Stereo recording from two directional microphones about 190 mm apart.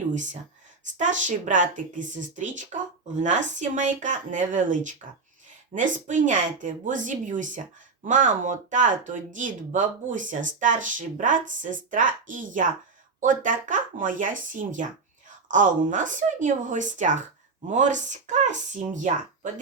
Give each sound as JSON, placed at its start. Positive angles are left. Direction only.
{"t": 0.1, "sound": "speech", "side_deg": -40}